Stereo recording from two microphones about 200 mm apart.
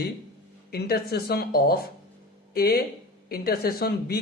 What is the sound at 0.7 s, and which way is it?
Speech, 50° left (ahead or behind).